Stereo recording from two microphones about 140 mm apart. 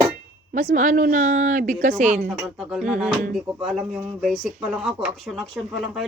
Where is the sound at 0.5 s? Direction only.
65° right (ahead or behind).